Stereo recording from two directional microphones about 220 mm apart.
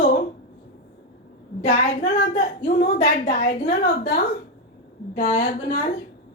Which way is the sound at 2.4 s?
35° left (ahead or behind).